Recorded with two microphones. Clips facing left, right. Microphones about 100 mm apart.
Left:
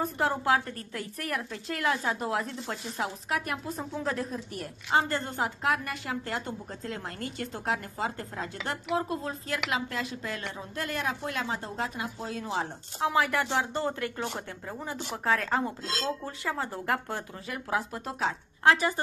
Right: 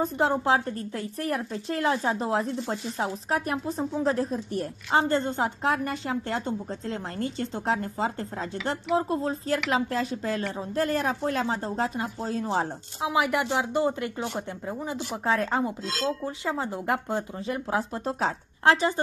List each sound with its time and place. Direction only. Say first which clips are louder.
0.0 s speech: right 4 dB; 20° right (ahead or behind)
13.0 s speech: right 1 dB; 15° right (ahead or behind)